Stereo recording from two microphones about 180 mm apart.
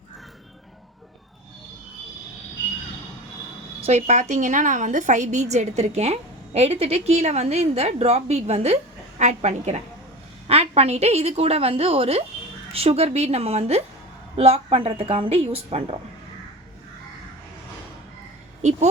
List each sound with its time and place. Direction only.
3.8 s a woman's voice: 35° right (ahead or behind)